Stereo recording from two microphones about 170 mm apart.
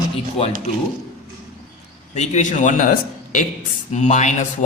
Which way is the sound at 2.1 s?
40° left (ahead or behind).